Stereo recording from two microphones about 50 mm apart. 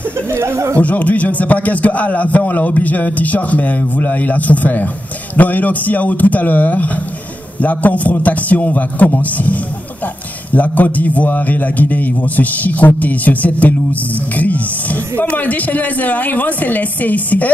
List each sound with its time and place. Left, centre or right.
0.3 s speech: right
0.7 s a man's voice: left